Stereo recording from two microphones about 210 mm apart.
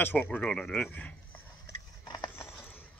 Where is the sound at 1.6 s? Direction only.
20° left (ahead or behind).